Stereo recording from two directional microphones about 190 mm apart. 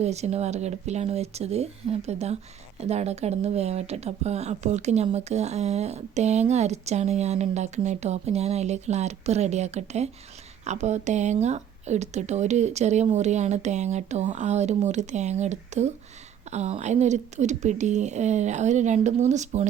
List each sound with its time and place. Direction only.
0.0 s speech: 35° right (ahead or behind)